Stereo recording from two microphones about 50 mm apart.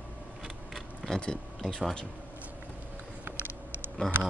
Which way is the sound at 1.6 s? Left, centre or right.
Centre.